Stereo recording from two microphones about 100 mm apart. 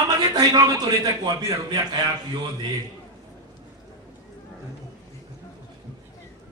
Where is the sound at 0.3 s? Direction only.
40° right (ahead or behind).